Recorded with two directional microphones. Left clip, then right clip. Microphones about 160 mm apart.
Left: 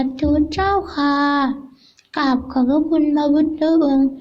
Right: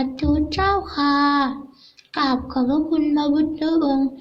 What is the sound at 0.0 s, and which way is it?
Child singing, 35° left (ahead or behind).